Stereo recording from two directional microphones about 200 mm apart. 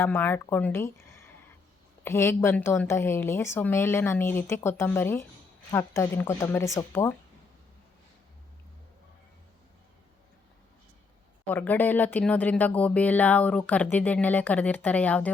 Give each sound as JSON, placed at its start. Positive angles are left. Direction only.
{"t": 0.0, "sound": "speech", "side_deg": 10}
{"t": 11.4, "sound": "speech", "side_deg": 10}